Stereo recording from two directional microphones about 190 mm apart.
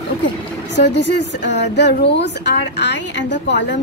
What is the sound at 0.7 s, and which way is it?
Speech, 70° left (ahead or behind).